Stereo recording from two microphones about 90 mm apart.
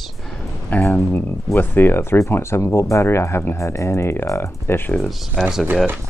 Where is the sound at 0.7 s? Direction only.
20° left (ahead or behind).